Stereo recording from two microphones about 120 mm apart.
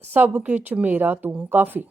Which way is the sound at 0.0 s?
15° right (ahead or behind).